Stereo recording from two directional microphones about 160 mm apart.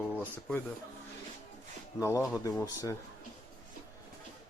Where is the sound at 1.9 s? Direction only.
20° left (ahead or behind).